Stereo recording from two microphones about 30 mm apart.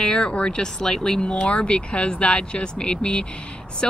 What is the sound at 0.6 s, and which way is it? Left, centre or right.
Speech, left.